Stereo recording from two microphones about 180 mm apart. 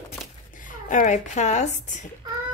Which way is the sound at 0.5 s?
45° left (ahead or behind).